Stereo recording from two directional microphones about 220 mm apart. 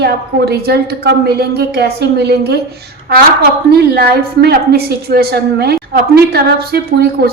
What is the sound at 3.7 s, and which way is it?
Female singing, 45° right (ahead or behind).